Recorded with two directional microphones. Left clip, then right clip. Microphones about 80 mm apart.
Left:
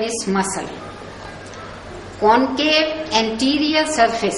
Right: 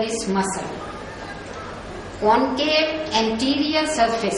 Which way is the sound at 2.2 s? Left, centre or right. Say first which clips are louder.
Left 3 dB; left.